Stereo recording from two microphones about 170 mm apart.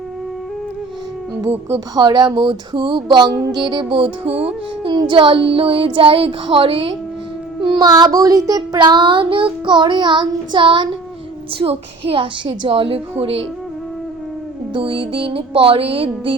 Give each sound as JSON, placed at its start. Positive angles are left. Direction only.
{"t": 2.0, "sound": "a woman's voice", "side_deg": -25}
{"t": 14.7, "sound": "a woman's voice", "side_deg": -30}